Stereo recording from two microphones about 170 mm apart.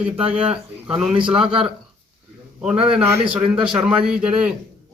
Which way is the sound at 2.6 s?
5° right (ahead or behind).